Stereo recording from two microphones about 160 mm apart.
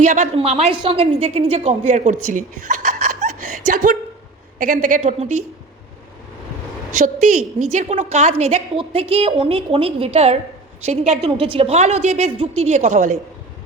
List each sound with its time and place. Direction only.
0.0 s a woman's voice: 50° right (ahead or behind)
6.9 s a woman's voice: 55° right (ahead or behind)